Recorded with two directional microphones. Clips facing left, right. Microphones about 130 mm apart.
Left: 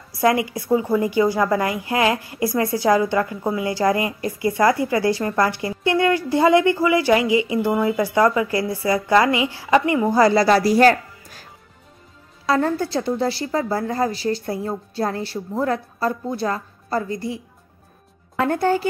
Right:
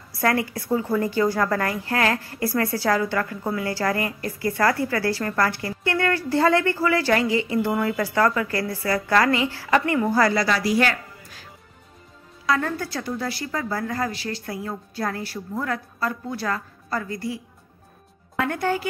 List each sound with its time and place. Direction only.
0.2 s a woman's voice: 15° left (ahead or behind)
10.4 s speech: 35° left (ahead or behind)
12.4 s a woman's voice: 30° left (ahead or behind)
18.4 s speech: 30° left (ahead or behind)